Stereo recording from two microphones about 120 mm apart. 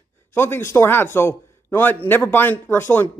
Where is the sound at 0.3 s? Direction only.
20° left (ahead or behind).